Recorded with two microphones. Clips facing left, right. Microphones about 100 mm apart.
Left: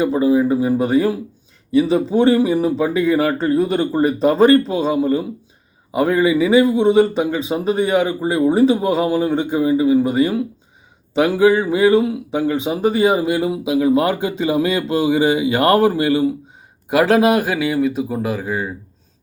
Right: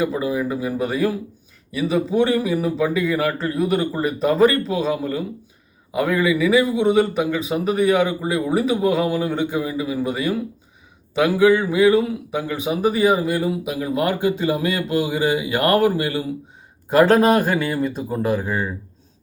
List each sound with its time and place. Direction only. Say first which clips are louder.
0.0 s speech: left 6 dB; 30° left (ahead or behind)
16.9 s speech: even; 10° left (ahead or behind)